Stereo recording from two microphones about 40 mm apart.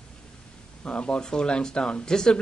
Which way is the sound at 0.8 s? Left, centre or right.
Left.